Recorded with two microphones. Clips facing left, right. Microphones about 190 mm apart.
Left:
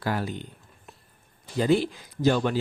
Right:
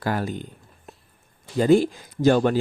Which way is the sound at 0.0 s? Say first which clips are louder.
Right 3 dB; 50° right (ahead or behind).